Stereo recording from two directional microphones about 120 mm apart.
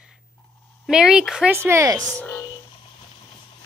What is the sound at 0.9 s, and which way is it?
Speech, 5° right (ahead or behind).